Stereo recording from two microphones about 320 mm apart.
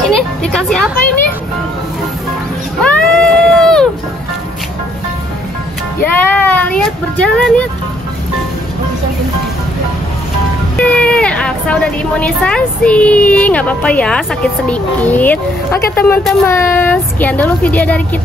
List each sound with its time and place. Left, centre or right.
0.0 s a woman's voice: centre
2.8 s a sound: centre
6.0 s a woman's voice: centre
10.8 s a woman's voice: centre